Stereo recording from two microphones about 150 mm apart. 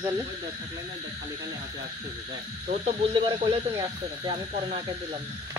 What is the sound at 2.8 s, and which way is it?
Speech, 40° right (ahead or behind).